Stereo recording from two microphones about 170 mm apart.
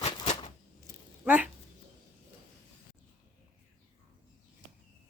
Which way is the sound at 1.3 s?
10° right (ahead or behind).